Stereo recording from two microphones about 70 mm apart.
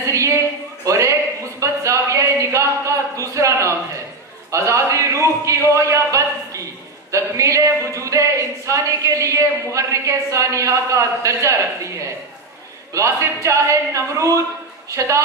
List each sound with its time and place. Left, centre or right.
0.1 s a sound: right
7.1 s speech: right
12.9 s speech: right